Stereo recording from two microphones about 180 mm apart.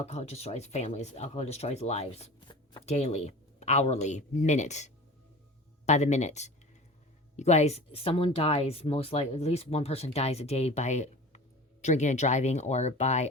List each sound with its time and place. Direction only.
0.0 s speech: 35° left (ahead or behind)